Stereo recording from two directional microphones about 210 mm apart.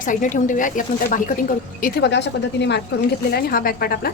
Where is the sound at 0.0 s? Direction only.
40° left (ahead or behind).